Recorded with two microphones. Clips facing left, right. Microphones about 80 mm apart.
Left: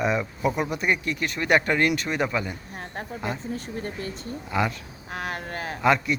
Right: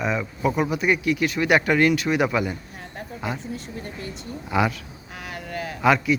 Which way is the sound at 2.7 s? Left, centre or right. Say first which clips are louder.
Left 2 dB; left.